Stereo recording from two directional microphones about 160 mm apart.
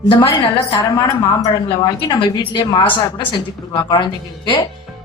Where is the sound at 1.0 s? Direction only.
20° left (ahead or behind).